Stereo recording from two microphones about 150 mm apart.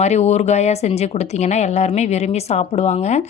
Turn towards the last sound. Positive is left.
turn(degrees=45)  # may be behind; listen again after turning